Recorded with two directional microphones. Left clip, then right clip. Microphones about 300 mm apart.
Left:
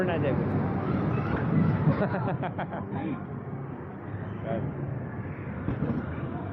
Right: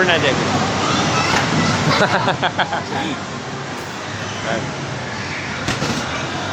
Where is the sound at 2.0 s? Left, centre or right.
Centre.